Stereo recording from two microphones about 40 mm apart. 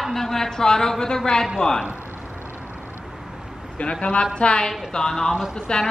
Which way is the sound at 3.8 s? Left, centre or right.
Left.